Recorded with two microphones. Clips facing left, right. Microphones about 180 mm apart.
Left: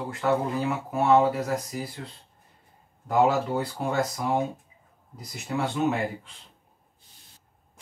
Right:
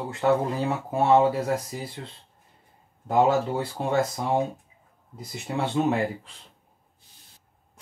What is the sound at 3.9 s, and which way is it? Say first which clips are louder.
Speech: right 3 dB; 30° right (ahead or behind).